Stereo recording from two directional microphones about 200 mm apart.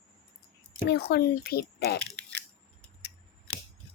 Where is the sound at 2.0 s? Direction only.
5° left (ahead or behind).